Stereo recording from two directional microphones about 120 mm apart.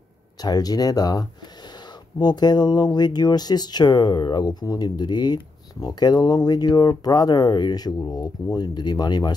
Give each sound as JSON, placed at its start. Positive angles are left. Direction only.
{"t": 0.4, "sound": "speech", "side_deg": 35}